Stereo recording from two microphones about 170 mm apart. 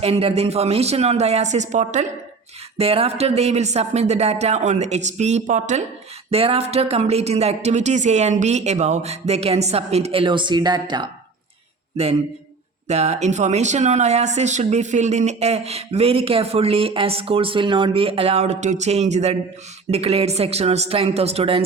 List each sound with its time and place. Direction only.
0.0 s speech: 35° right (ahead or behind)
2.7 s speech: 35° right (ahead or behind)
6.3 s speech: 35° right (ahead or behind)
12.0 s speech: 40° right (ahead or behind)